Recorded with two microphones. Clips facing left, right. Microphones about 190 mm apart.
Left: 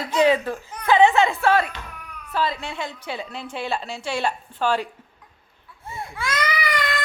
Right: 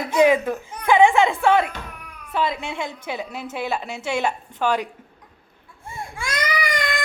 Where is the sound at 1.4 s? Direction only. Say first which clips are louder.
Right 2 dB; 20° right (ahead or behind).